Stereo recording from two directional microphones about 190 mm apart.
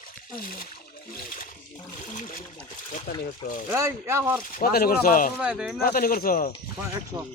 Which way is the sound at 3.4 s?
45° left (ahead or behind).